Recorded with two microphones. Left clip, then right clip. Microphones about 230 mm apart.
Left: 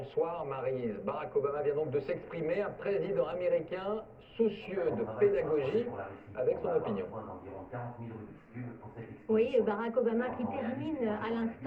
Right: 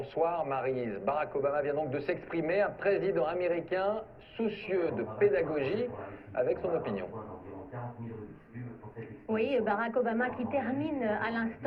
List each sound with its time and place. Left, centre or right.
0.0 s speech: right
9.3 s speech: right